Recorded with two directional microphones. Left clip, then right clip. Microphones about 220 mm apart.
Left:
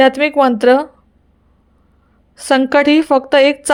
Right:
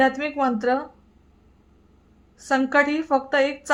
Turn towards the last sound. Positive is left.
turn(degrees=40)  # may be behind; listen again after turning